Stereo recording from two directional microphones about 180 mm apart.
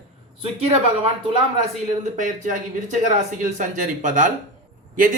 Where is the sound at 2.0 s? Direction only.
45° right (ahead or behind).